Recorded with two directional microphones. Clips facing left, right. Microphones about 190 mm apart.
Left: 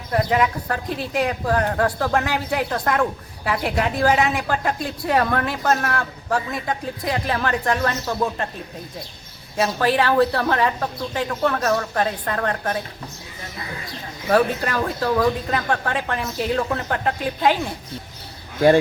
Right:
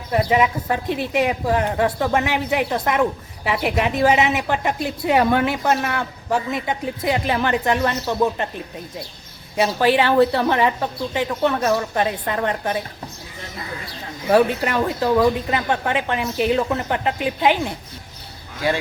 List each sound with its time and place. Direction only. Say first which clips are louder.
0.1 s a woman's voice: right 2 dB; 5° right (ahead or behind)
9.6 s a woman's voice: right 2 dB; centre (ahead or behind)
10.2 s a woman's voice: right 2 dB; 20° right (ahead or behind)
10.6 s a woman's voice: right 2 dB; 5° right (ahead or behind)
14.3 s a woman's voice: right 2 dB; 5° right (ahead or behind)